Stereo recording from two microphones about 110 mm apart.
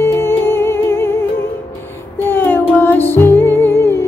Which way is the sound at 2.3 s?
20° left (ahead or behind).